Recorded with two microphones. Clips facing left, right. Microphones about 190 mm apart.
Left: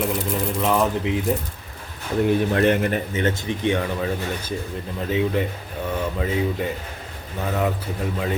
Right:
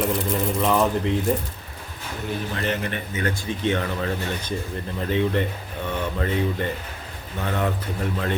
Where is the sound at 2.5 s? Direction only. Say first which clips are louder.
Left 8 dB; 55° left (ahead or behind).